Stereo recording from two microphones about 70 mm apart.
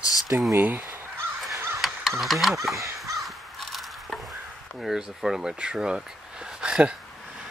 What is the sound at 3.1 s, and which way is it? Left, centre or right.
Crow, centre.